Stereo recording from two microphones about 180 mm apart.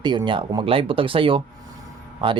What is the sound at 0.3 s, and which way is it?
Speech, 25° right (ahead or behind).